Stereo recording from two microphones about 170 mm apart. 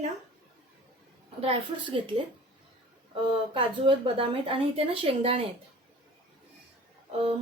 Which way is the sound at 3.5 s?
30° right (ahead or behind).